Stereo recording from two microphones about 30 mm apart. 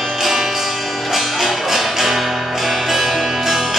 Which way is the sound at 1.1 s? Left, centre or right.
Centre.